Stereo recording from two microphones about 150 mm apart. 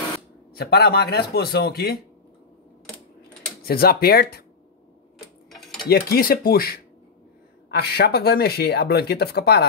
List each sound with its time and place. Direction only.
0.6 s speech: 90° left
3.6 s speech: 90° left
5.5 s a sound: centre (ahead or behind)
5.9 s speech: 90° left